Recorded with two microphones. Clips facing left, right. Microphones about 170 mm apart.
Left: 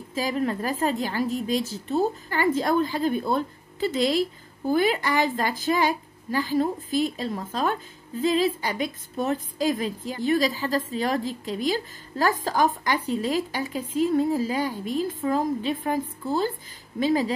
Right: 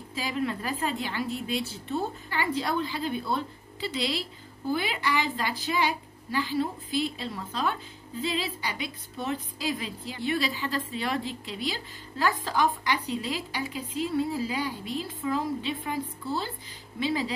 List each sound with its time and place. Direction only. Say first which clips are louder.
0.1 s a woman's voice: left 5 dB; 45° left (ahead or behind)